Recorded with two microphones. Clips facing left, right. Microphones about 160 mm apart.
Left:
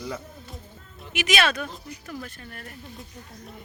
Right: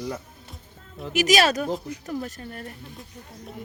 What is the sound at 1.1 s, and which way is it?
A man's voice, 40° right (ahead or behind).